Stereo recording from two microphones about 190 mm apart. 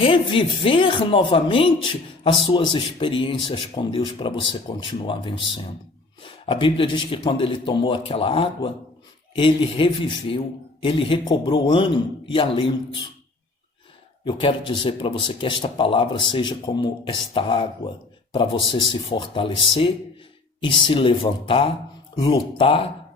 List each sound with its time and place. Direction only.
0.0 s a man's voice: 30° left (ahead or behind)
14.3 s a man's voice: 25° left (ahead or behind)